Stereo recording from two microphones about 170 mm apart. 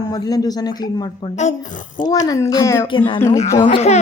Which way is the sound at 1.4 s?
45° left (ahead or behind).